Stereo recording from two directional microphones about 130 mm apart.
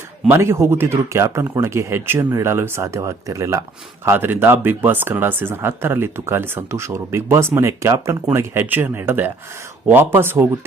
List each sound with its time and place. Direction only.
0.3 s speech: 20° right (ahead or behind)